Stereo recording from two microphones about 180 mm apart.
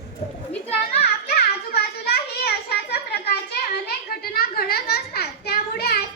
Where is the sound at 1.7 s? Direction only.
60° left (ahead or behind).